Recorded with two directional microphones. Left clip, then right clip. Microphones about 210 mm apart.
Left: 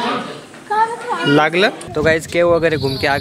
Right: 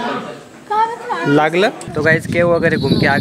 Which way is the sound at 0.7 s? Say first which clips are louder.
Even; 5° right (ahead or behind).